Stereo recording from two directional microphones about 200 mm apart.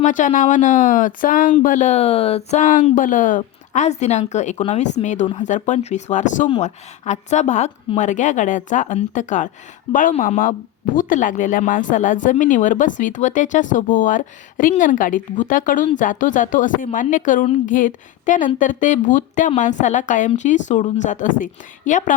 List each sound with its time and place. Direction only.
0.0 s speech: 40° left (ahead or behind)